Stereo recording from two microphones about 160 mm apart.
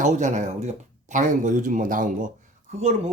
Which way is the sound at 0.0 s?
50° right (ahead or behind).